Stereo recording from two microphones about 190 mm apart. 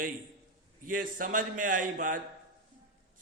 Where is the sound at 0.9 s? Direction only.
45° right (ahead or behind).